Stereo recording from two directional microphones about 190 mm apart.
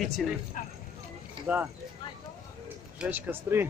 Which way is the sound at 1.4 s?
25° right (ahead or behind).